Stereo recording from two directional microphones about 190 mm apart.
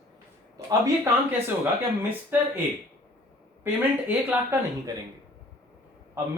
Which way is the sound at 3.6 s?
10° right (ahead or behind).